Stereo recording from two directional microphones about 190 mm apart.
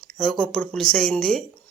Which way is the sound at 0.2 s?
5° left (ahead or behind).